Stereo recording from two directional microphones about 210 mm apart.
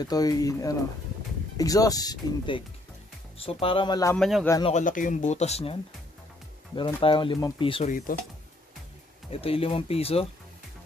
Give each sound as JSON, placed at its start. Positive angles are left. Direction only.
{"t": 0.0, "sound": "speech", "side_deg": 20}
{"t": 4.2, "sound": "speech", "side_deg": 0}
{"t": 4.5, "sound": "speech", "side_deg": 20}
{"t": 4.7, "sound": "speech", "side_deg": 40}
{"t": 9.3, "sound": "speech", "side_deg": 25}